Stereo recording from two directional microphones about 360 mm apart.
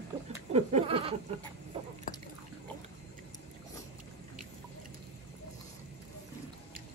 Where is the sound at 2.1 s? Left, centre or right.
Left.